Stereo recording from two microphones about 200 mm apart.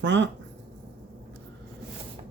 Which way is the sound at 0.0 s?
60° right (ahead or behind).